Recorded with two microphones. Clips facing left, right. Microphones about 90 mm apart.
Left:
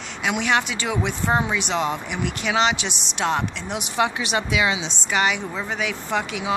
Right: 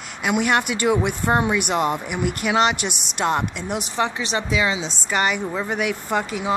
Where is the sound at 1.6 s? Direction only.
50° right (ahead or behind).